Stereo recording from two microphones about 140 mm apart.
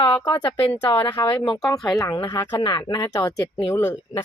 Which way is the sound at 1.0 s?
30° left (ahead or behind).